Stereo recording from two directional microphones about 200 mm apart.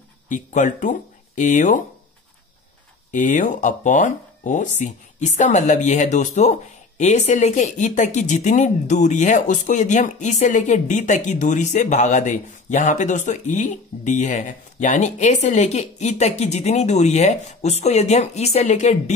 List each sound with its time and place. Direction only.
0.3 s speech: 40° left (ahead or behind)
3.1 s speech: 40° left (ahead or behind)